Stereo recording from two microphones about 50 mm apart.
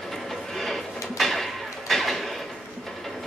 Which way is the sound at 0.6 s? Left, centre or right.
Centre.